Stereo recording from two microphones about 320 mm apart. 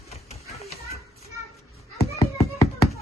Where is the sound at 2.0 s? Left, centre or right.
Centre.